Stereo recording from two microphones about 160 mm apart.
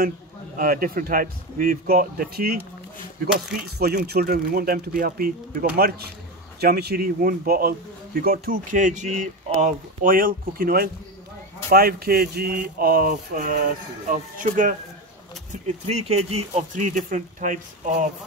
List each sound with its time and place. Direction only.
0.6 s speech: 65° right (ahead or behind)
3.7 s speech: 80° right; by 5.7 s 60° right (ahead or behind)
5.8 s speech: 75° right (ahead or behind); by 14.8 s 55° right (ahead or behind)
15.5 s speech: 45° right (ahead or behind)